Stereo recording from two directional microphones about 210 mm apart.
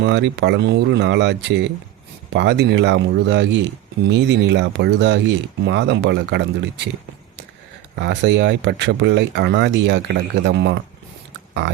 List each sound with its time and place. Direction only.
0.0 s speech: 55° right (ahead or behind)
7.9 s speech: 60° right (ahead or behind)